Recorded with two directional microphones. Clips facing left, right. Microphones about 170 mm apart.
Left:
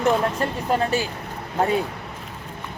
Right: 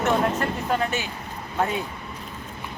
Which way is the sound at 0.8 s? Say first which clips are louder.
Left 4 dB; 35° left (ahead or behind).